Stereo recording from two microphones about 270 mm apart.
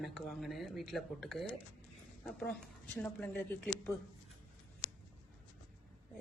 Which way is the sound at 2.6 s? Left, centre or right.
Centre.